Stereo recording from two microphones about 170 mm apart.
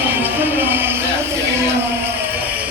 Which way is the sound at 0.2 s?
10° right (ahead or behind).